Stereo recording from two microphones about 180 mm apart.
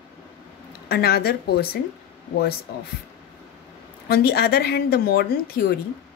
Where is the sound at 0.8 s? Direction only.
60° left (ahead or behind).